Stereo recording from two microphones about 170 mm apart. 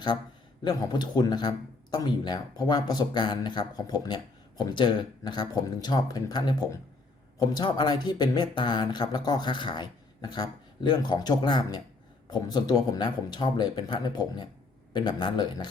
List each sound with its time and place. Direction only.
0.6 s speech: 25° left (ahead or behind)